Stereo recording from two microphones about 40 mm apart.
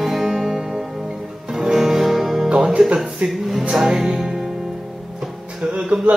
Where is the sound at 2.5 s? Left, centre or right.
Right.